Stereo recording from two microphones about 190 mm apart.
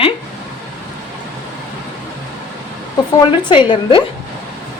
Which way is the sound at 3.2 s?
25° left (ahead or behind).